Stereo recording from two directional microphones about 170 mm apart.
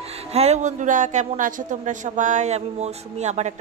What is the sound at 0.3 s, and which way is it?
Speech, 40° right (ahead or behind).